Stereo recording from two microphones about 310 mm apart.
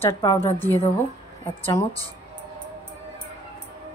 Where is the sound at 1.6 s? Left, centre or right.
Centre.